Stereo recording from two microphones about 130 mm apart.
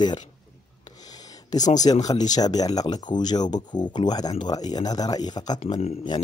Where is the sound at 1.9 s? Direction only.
40° left (ahead or behind).